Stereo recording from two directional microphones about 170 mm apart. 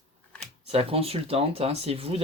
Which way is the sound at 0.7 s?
35° right (ahead or behind).